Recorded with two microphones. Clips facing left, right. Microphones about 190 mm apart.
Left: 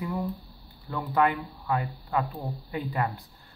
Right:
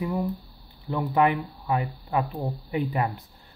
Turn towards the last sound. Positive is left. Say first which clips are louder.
# right 4 dB
turn(degrees=-15)  # may be behind; listen again after turning